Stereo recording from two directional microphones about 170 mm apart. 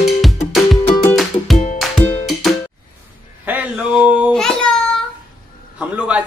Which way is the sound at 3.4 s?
10° right (ahead or behind).